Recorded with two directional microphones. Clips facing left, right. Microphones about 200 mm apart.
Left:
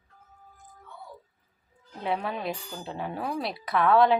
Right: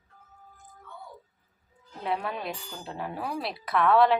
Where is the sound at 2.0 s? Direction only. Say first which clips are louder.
Left 1 dB; centre (ahead or behind).